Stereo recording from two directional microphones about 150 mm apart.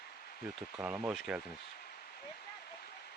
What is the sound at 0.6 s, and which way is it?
Speech, 5° right (ahead or behind).